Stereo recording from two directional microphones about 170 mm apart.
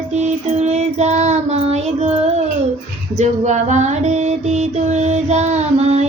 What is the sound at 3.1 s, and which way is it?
Music, 45° right (ahead or behind).